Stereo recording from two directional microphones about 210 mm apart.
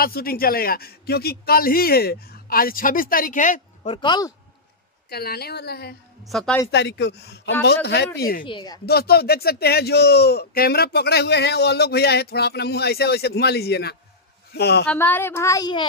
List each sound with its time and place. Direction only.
0.0 s speech: 45° left (ahead or behind)
3.9 s speech: 20° left (ahead or behind)
5.1 s speech: 45° left (ahead or behind)
6.2 s speech: centre (ahead or behind)
6.7 s speech: 55° left (ahead or behind)
8.5 s speech: 20° left (ahead or behind)
8.8 s speech: 50° left (ahead or behind)
14.9 s a woman's voice: 10° left (ahead or behind)